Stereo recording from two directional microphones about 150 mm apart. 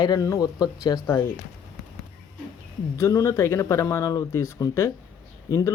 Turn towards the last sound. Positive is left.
turn(degrees=20)  # may be behind; listen again after turning